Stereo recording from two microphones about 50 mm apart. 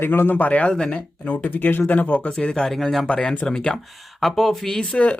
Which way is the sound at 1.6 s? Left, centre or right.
Left.